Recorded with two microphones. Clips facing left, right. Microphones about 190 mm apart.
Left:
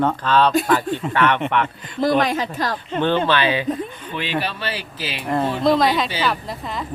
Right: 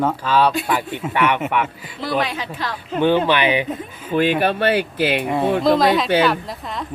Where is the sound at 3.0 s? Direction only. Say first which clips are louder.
Right 3 dB; 10° right (ahead or behind).